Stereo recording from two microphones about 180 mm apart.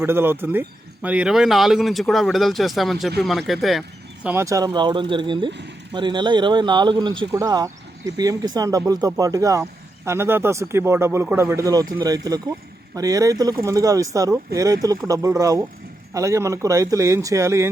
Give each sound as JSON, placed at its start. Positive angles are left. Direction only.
{"t": 0.0, "sound": "speech", "side_deg": -10}